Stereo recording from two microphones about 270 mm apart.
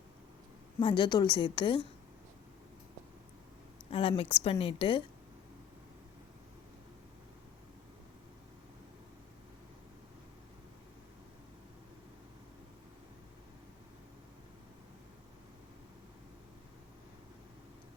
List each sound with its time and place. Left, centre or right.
0.8 s a woman's voice: centre
3.8 s a woman's voice: left